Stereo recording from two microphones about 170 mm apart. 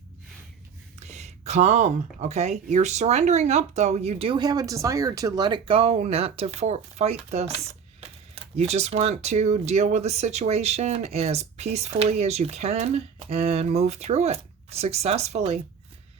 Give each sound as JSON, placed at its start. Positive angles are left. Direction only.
{"t": 0.9, "sound": "speech", "side_deg": -40}